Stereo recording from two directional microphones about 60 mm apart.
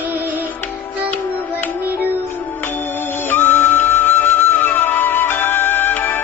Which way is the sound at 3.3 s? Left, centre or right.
Left.